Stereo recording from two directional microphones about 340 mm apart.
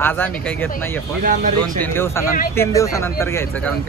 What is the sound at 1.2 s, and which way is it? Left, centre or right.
Speech, right.